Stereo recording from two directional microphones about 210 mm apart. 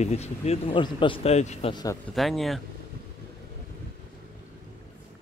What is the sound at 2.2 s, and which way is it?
Speech, centre (ahead or behind).